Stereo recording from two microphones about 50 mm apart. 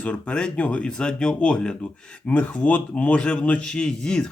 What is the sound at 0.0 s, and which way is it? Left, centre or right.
Speech, left.